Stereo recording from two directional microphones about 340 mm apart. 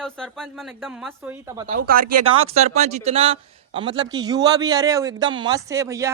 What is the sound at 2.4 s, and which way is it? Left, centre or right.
A man's voice, centre.